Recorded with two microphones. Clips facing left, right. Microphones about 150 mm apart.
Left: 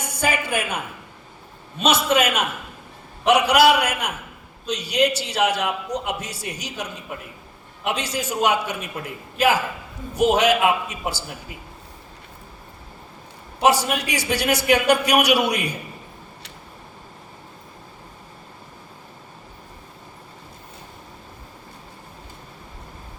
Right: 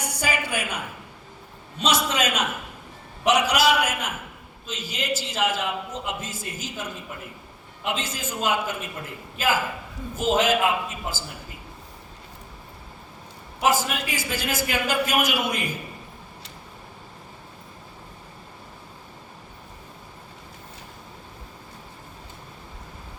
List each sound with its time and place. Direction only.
0.0 s a sound: 55° left (ahead or behind)
1.8 s a man's voice: 60° left (ahead or behind); by 6.8 s 75° left (ahead or behind)
7.9 s a man's voice: 75° left (ahead or behind)
10.2 s a man's voice: 75° left (ahead or behind)
13.7 s a man's voice: 75° left (ahead or behind)